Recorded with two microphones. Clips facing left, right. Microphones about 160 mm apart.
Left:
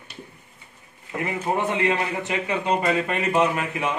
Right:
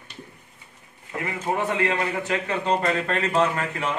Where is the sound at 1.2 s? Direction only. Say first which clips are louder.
Left 1 dB; 20° left (ahead or behind).